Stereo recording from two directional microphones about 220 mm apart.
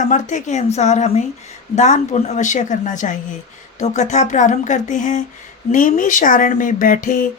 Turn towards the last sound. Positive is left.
turn(degrees=35)  # may be behind; listen again after turning